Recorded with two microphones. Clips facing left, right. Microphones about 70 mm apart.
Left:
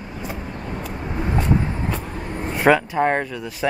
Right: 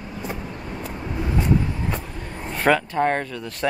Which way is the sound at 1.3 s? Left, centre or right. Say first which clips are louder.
Even; left.